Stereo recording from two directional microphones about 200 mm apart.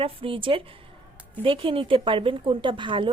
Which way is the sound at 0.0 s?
25° right (ahead or behind).